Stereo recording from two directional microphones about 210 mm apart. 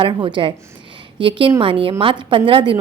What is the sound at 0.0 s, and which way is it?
A woman's voice, 25° right (ahead or behind).